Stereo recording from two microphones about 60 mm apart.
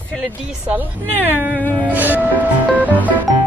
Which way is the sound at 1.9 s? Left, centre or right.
Right.